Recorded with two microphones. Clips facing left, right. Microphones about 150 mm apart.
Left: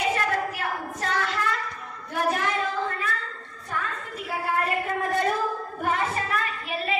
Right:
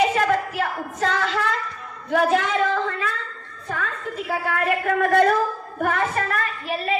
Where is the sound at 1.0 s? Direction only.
90° right.